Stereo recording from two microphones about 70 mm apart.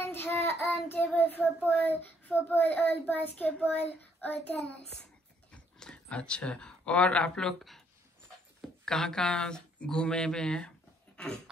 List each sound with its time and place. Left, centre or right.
0.0 s child singing: left
1.7 s a child's voice: left
5.5 s speech: centre